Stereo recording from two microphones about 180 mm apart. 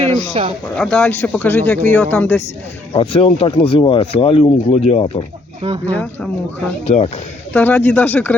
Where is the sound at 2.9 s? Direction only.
30° left (ahead or behind).